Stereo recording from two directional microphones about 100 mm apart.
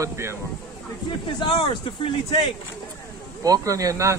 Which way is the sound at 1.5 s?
55° left (ahead or behind).